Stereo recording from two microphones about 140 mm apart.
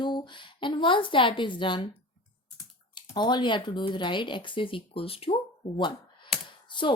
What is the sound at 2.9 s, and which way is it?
A woman's voice, 30° left (ahead or behind).